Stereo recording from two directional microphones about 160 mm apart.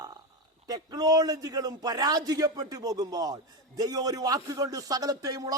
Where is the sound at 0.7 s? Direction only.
25° right (ahead or behind).